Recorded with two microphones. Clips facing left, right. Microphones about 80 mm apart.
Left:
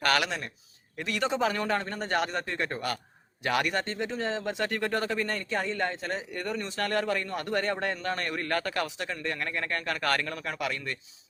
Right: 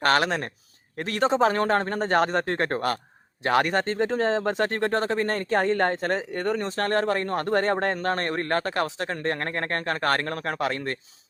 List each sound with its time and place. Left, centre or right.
0.0 s speech: right
9.0 s speech: right
9.9 s speech: right